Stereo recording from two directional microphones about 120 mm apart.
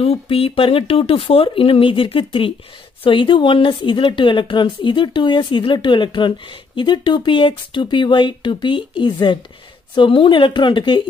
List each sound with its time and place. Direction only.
0.0 s speech: 55° left (ahead or behind)